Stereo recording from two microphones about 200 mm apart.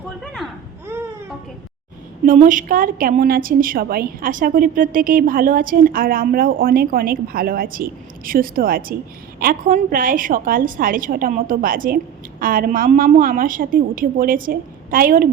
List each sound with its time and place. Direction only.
0.4 s a sound: centre (ahead or behind)
0.9 s baby cry: 10° right (ahead or behind)
2.2 s a woman's voice: 40° right (ahead or behind)